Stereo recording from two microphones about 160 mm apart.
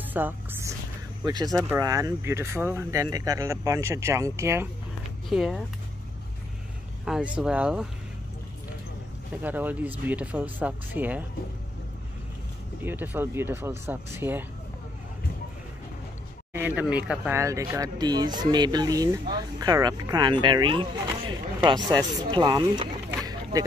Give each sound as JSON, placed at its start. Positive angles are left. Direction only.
{"t": 0.1, "sound": "music", "side_deg": -10}
{"t": 1.2, "sound": "speech", "side_deg": -25}
{"t": 5.3, "sound": "speech", "side_deg": 0}
{"t": 7.1, "sound": "speech", "side_deg": -5}
{"t": 9.4, "sound": "speech", "side_deg": -10}
{"t": 12.8, "sound": "speech", "side_deg": -10}
{"t": 16.5, "sound": "speech", "side_deg": -10}
{"t": 17.4, "sound": "speech", "side_deg": -20}